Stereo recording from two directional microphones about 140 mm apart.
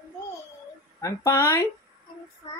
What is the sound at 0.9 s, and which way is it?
Speech, 20° left (ahead or behind).